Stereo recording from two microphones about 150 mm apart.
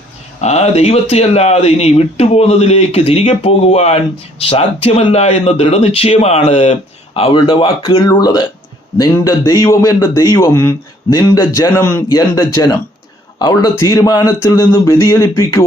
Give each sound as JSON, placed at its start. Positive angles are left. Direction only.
{"t": 0.4, "sound": "a man's voice", "side_deg": 45}
{"t": 14.7, "sound": "a man's voice", "side_deg": 15}